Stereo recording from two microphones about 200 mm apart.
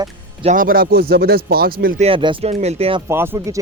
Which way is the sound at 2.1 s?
25° right (ahead or behind).